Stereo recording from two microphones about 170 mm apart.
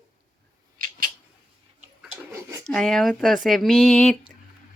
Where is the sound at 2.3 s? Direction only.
15° right (ahead or behind).